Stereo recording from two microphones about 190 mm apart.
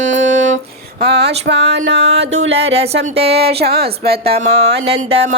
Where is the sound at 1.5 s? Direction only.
70° right (ahead or behind).